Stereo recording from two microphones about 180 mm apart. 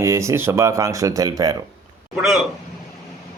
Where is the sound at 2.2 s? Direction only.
Centre (ahead or behind).